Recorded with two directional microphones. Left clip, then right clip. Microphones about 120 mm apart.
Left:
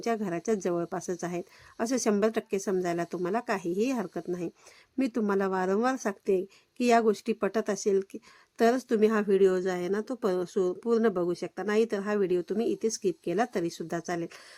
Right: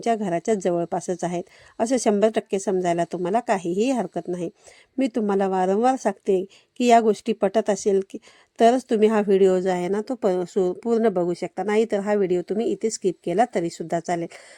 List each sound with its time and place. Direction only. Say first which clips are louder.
0.0 s a woman's voice: right 8 dB; 30° right (ahead or behind)